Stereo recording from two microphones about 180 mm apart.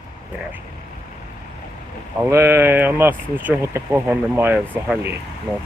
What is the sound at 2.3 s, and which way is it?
Speech, 15° right (ahead or behind).